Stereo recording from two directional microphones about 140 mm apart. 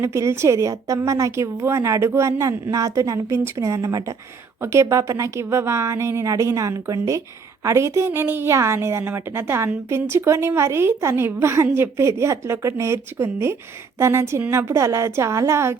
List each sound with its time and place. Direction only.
0.0 s a woman's voice: 20° right (ahead or behind)